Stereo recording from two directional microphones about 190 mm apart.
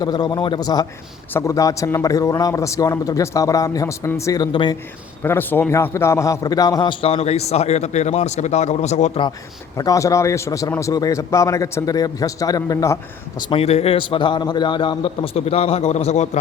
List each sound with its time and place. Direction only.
0.0 s a man's voice: 20° left (ahead or behind)
5.2 s a man's voice: 10° left (ahead or behind); by 9.2 s 35° left (ahead or behind)
9.7 s a man's voice: 20° left (ahead or behind)
13.4 s a man's voice: 30° left (ahead or behind)